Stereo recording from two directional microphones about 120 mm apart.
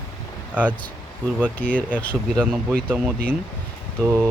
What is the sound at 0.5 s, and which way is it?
Speech, 10° right (ahead or behind).